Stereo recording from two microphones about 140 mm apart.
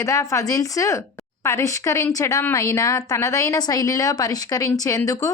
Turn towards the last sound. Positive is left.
turn(degrees=25)  # may be behind; listen again after turning